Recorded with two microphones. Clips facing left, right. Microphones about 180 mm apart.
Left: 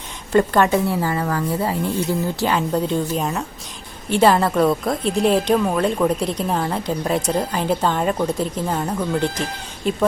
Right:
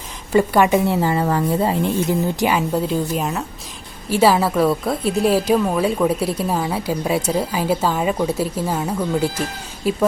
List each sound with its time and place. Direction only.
0.3 s a woman's voice: 10° right (ahead or behind)
2.6 s a woman's voice: 5° right (ahead or behind)